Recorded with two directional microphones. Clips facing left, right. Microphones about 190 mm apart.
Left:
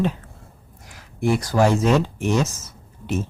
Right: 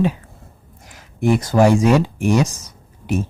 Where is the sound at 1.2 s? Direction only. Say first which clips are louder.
Right 4 dB; 20° right (ahead or behind).